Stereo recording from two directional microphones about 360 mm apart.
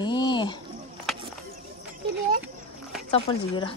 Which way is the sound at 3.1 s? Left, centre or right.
Centre.